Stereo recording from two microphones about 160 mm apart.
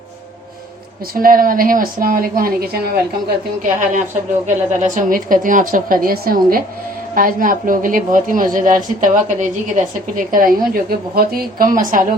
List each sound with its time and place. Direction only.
1.1 s a woman's voice: 65° right (ahead or behind)
3.6 s a woman's voice: 55° right (ahead or behind)
10.3 s a woman's voice: 60° right (ahead or behind)